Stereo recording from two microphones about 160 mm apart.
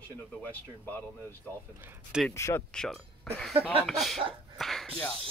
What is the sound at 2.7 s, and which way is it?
Speech, 5° left (ahead or behind).